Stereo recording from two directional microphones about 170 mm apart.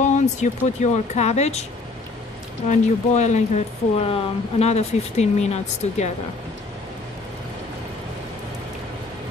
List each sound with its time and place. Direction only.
0.0 s speech: 45° left (ahead or behind)
2.7 s speech: 45° left (ahead or behind)